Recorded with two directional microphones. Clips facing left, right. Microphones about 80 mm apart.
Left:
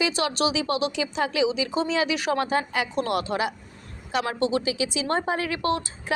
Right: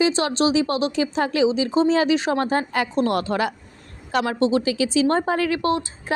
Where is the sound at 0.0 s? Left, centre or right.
Right.